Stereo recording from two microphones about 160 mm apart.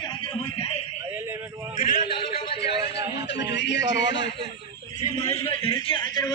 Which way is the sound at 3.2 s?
90° left.